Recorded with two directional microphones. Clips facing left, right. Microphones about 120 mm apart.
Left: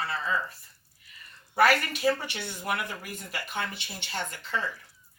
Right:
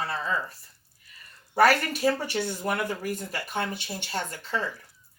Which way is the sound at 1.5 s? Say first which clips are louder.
Right 2 dB; 40° right (ahead or behind).